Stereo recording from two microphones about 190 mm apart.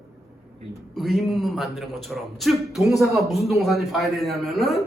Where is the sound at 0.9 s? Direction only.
Centre (ahead or behind).